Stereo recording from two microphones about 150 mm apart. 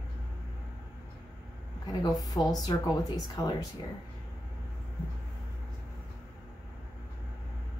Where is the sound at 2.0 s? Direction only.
25° left (ahead or behind).